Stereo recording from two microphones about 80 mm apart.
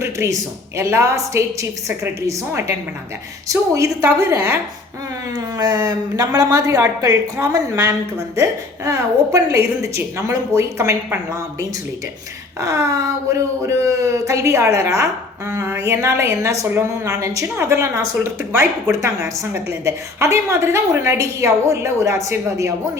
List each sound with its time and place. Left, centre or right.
0.0 s a sound: right
0.8 s a woman's voice: right
4.4 s speech: right
5.5 s a woman's voice: right
12.5 s a woman's voice: right